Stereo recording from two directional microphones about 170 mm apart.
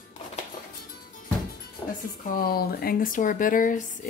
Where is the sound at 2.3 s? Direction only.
65° left (ahead or behind).